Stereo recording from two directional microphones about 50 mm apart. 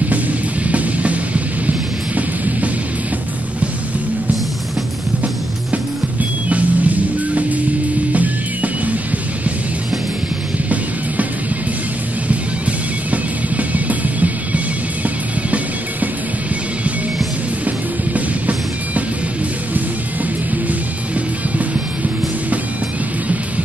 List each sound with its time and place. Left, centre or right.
0.7 s music: right
6.5 s music: right
13.1 s music: right
17.6 s music: right